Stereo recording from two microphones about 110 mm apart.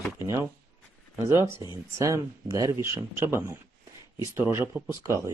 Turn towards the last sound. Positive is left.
turn(degrees=-30)  # may be behind; listen again after turning